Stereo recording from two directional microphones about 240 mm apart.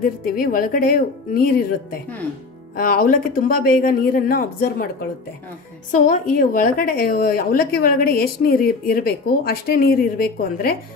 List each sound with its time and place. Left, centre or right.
0.0 s a woman's voice: left
5.9 s a woman's voice: left